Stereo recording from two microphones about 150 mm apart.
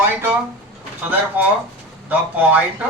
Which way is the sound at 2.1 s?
10° right (ahead or behind).